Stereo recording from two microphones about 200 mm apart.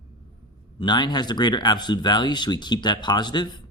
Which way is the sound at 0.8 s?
20° left (ahead or behind).